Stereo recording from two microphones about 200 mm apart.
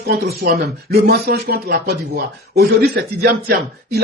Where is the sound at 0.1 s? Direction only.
50° right (ahead or behind).